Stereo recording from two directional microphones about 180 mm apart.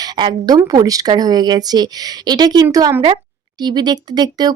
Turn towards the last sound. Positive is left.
turn(degrees=-20)  # may be behind; listen again after turning